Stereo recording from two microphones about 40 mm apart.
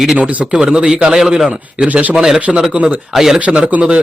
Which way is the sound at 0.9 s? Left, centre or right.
Centre.